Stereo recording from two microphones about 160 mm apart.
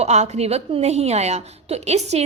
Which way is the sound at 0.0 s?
45° right (ahead or behind).